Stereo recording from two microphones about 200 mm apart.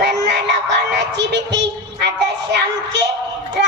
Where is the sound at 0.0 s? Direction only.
55° right (ahead or behind).